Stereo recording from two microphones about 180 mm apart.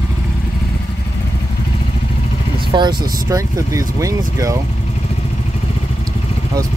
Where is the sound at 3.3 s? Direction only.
20° right (ahead or behind).